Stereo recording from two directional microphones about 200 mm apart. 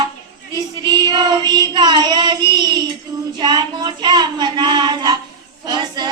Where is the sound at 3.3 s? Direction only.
20° right (ahead or behind).